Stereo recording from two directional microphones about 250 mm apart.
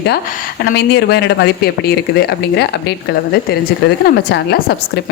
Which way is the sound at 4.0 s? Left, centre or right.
Left.